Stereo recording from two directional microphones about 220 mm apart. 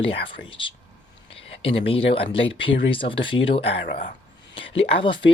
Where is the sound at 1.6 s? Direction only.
25° left (ahead or behind).